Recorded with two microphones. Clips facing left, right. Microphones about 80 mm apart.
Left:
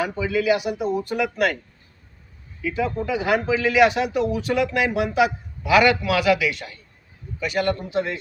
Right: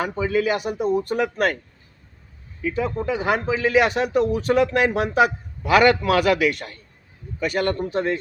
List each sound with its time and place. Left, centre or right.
0.0 s speech: right
2.6 s speech: right